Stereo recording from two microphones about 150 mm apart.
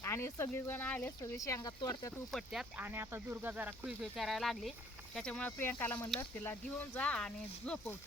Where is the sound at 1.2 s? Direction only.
20° left (ahead or behind).